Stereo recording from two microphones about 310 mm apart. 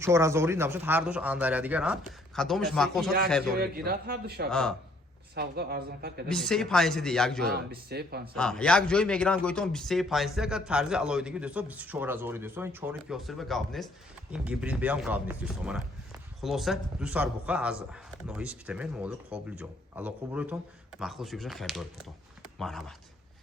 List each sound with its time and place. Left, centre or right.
0.0 s a man's voice: centre
3.6 s speech: right
6.2 s a man's voice: centre
7.4 s speech: right
8.4 s a man's voice: centre